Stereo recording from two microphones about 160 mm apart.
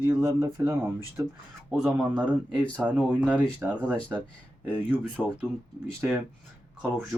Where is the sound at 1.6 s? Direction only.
Centre (ahead or behind).